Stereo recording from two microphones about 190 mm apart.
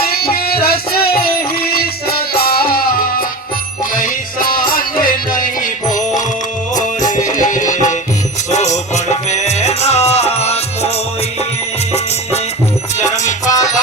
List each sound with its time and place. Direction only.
0.0 s music: 55° left (ahead or behind)
7.3 s music: 40° left (ahead or behind)
13.4 s music: 20° left (ahead or behind)